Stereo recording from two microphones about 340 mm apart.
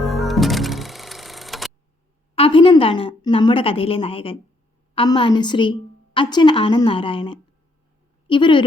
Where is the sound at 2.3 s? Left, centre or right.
Centre.